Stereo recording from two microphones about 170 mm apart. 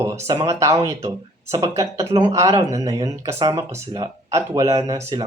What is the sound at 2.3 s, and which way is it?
Speech, 20° right (ahead or behind).